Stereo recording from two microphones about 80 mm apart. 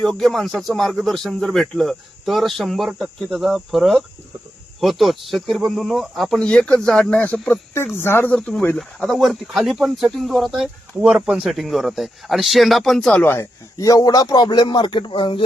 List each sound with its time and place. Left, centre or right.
0.0 s speech: centre
7.9 s speech: left
8.3 s speech: centre
11.0 s speech: centre
11.4 s speech: centre
13.4 s speech: left